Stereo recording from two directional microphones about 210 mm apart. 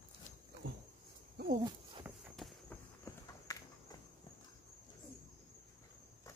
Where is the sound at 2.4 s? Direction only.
Centre (ahead or behind).